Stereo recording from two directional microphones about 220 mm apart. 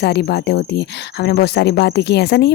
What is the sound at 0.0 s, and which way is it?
Speech, 50° left (ahead or behind).